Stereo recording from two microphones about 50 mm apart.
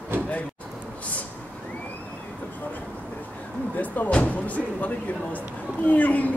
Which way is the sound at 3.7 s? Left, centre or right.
Left.